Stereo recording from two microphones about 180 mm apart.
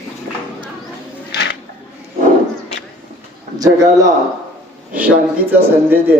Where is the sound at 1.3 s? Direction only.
70° left (ahead or behind).